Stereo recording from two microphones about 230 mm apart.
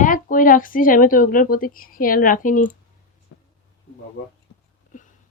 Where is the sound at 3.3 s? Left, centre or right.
Left.